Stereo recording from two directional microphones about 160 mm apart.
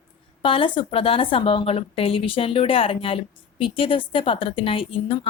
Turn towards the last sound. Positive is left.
turn(degrees=35)  # may be behind; listen again after turning